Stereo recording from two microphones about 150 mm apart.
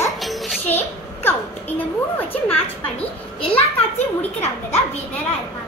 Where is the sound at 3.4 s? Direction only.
40° left (ahead or behind).